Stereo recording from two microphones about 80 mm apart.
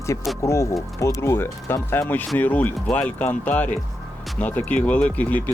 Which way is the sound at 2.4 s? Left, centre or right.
Left.